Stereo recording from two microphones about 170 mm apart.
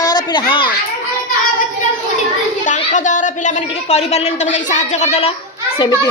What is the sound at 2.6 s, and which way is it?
Speech, 45° left (ahead or behind).